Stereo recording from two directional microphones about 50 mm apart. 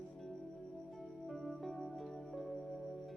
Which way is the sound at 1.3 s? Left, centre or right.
Centre.